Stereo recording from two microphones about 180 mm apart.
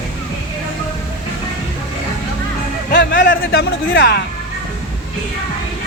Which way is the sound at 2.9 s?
90° left.